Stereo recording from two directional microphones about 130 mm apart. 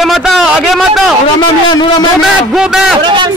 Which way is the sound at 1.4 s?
35° left (ahead or behind).